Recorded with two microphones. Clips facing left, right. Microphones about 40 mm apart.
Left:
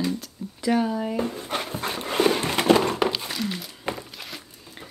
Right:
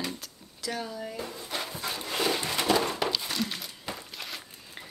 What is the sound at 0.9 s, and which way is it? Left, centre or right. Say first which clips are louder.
Dog: left 10 dB; left.